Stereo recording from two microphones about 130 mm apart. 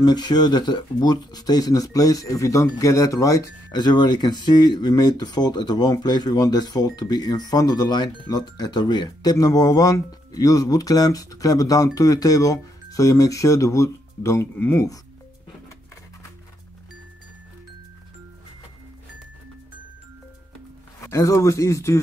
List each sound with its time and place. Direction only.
0.0 s speech: 35° left (ahead or behind); by 14.9 s 15° left (ahead or behind)
21.1 s speech: 25° left (ahead or behind)